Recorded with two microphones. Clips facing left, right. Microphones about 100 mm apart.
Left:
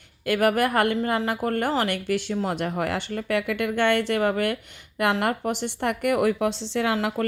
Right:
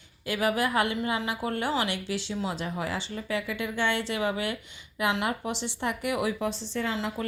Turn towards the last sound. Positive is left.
turn(degrees=60)  # may be behind; listen again after turning